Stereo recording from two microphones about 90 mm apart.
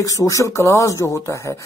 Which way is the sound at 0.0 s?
40° left (ahead or behind).